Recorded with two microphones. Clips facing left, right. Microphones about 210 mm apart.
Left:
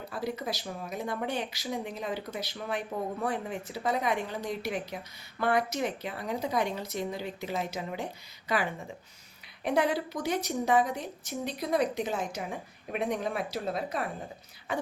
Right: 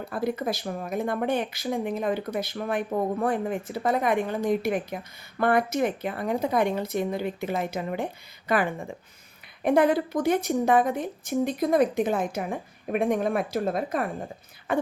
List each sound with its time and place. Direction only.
0.1 s speech: 55° right (ahead or behind)